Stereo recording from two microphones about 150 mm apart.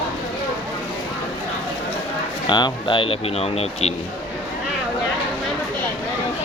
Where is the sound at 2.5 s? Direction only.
30° left (ahead or behind).